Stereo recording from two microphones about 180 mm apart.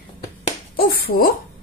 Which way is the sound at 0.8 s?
60° left (ahead or behind).